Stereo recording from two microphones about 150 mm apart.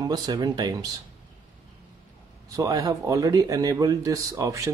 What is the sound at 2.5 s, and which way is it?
Speech, 25° right (ahead or behind).